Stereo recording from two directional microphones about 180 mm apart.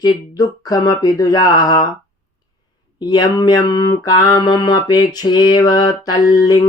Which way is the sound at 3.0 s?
25° left (ahead or behind).